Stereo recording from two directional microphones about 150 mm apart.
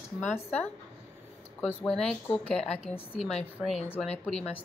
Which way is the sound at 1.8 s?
5° left (ahead or behind).